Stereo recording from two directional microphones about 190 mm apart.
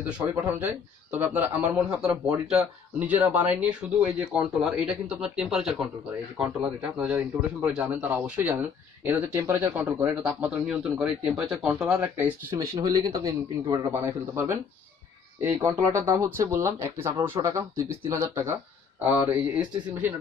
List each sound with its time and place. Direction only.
1.1 s a man's voice: 10° right (ahead or behind)